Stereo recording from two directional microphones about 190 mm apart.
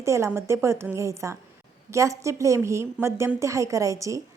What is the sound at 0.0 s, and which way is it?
Speech, 15° right (ahead or behind).